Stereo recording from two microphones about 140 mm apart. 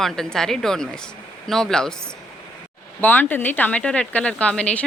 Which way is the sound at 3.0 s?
15° left (ahead or behind).